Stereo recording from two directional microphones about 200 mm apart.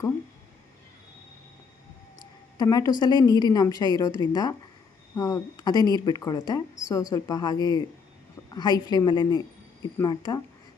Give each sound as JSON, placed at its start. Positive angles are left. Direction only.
{"t": 2.6, "sound": "a woman's voice", "side_deg": 20}
{"t": 8.9, "sound": "a woman's voice", "side_deg": 20}